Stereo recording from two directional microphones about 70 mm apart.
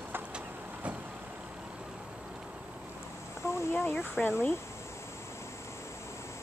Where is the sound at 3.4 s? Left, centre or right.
Left.